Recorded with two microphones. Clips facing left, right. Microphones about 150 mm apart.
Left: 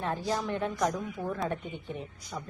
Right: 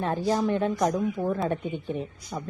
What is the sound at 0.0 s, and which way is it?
A woman's voice, 30° right (ahead or behind).